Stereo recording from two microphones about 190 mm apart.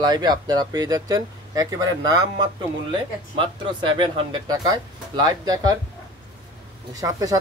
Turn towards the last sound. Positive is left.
turn(degrees=-20)  # may be behind; listen again after turning